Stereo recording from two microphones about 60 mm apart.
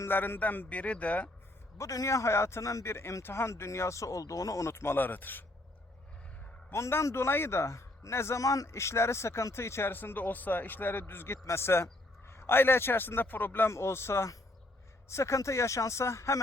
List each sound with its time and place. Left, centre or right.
0.1 s a man's voice: left
1.8 s speech: left
4.6 s a man's voice: left
6.7 s a man's voice: left
9.9 s a man's voice: left
13.7 s a man's voice: left